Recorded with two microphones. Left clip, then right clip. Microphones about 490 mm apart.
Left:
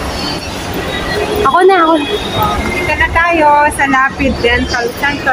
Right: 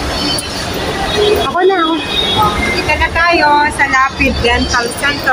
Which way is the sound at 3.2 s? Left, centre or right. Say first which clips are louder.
Left 1 dB; left.